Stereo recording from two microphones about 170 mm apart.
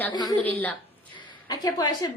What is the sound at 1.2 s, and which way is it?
Speech, 25° left (ahead or behind).